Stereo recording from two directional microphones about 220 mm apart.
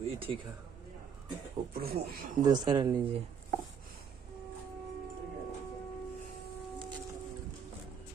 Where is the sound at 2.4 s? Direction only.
20° right (ahead or behind).